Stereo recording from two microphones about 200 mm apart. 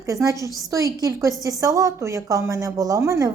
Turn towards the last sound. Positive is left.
turn(degrees=-15)  # may be behind; listen again after turning